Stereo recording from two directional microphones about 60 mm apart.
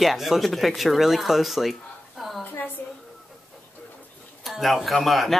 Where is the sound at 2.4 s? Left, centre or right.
Left.